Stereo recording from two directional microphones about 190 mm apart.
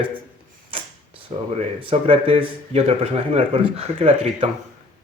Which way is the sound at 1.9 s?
30° right (ahead or behind).